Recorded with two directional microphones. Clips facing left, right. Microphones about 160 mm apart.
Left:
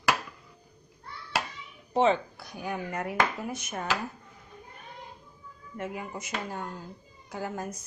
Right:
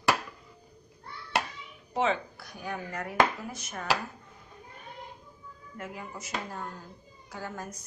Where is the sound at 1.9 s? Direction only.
25° left (ahead or behind).